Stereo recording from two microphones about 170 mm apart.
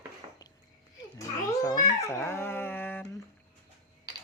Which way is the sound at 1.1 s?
20° left (ahead or behind).